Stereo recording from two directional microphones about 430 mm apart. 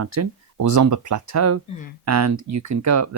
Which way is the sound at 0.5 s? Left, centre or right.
Right.